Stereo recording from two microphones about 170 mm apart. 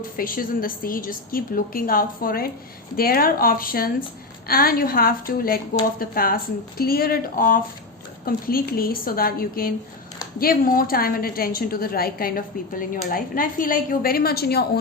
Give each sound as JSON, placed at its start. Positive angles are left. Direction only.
{"t": 0.2, "sound": "a woman's voice", "side_deg": 55}